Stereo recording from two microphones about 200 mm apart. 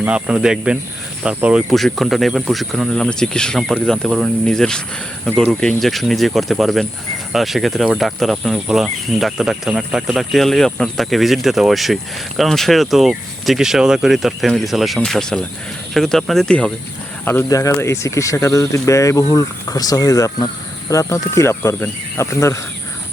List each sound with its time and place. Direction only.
0.0 s speech: 5° right (ahead or behind); by 22.5 s 15° left (ahead or behind)